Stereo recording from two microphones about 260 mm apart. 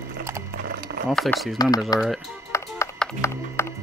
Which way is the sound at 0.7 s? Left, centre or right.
Right.